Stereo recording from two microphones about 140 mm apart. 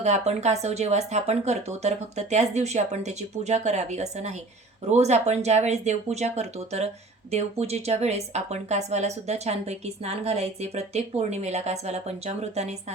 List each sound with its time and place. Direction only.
0.0 s speech: 55° right (ahead or behind)